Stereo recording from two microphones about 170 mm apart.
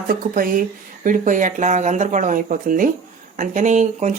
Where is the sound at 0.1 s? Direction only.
55° right (ahead or behind).